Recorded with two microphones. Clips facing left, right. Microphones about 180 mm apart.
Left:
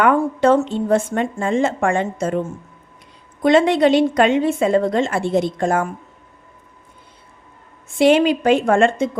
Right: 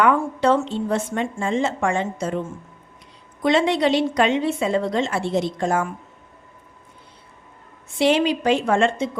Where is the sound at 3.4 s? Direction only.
50° left (ahead or behind).